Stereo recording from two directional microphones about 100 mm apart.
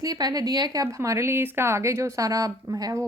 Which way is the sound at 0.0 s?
40° right (ahead or behind).